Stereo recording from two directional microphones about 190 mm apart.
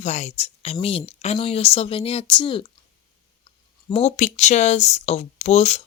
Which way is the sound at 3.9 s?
35° left (ahead or behind).